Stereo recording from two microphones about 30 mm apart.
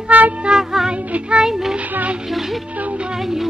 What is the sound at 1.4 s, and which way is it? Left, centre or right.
Child singing, centre.